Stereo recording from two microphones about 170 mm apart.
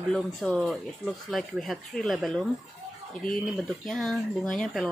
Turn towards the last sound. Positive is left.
turn(degrees=0)  # may be behind; listen again after turning